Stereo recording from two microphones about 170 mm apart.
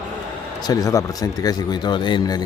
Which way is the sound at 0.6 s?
20° left (ahead or behind).